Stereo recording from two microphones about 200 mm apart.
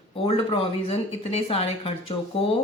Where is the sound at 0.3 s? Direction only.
30° left (ahead or behind).